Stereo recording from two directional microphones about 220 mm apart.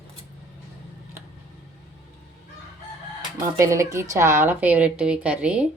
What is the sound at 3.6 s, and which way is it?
Speech, 15° right (ahead or behind).